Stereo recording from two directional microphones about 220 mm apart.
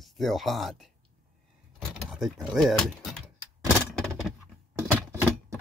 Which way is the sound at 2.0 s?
Centre (ahead or behind).